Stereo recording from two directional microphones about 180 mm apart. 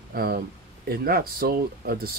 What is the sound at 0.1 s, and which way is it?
Speech, 55° right (ahead or behind).